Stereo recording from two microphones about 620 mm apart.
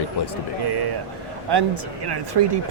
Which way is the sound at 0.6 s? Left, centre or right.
Right.